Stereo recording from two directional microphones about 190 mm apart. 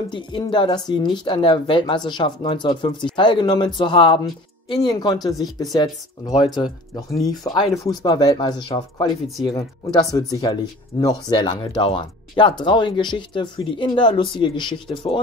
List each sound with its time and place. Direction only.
0.1 s speech: 25° left (ahead or behind)